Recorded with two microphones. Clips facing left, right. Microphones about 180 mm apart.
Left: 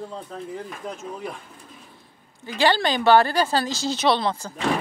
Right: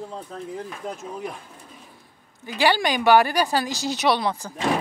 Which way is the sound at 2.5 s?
15° right (ahead or behind).